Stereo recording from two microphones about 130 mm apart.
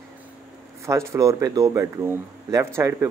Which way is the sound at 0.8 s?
20° right (ahead or behind).